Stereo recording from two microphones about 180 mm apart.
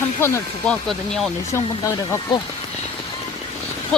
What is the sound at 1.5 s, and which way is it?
Speech, 15° left (ahead or behind).